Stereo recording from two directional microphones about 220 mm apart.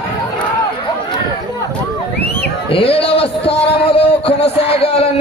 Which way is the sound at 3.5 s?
25° left (ahead or behind).